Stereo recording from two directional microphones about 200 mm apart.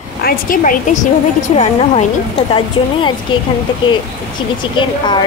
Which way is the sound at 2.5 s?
25° left (ahead or behind).